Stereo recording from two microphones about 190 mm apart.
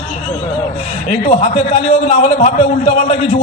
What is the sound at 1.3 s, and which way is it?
A man's voice, 35° left (ahead or behind).